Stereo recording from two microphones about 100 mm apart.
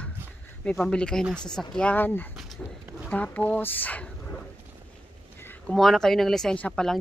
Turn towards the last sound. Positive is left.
turn(degrees=15)  # may be behind; listen again after turning